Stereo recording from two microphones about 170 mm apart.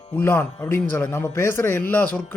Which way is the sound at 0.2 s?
10° left (ahead or behind).